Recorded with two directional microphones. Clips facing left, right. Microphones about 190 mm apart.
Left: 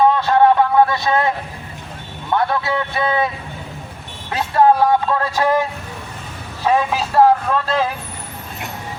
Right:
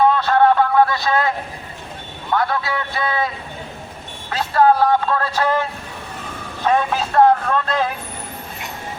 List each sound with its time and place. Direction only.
0.2 s a sound: 20° left (ahead or behind)
2.3 s a man's voice: 25° left (ahead or behind)
4.3 s speech: 15° left (ahead or behind)